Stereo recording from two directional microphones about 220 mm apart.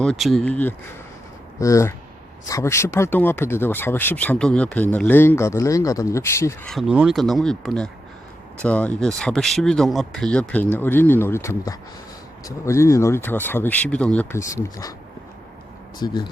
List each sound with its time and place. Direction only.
0.0 s speech: centre (ahead or behind)
6.7 s speech: centre (ahead or behind); by 14.9 s 15° left (ahead or behind)
16.0 s speech: 20° left (ahead or behind)